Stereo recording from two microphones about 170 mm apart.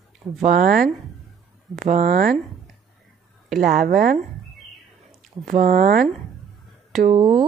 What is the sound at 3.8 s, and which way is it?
Speech, 55° right (ahead or behind).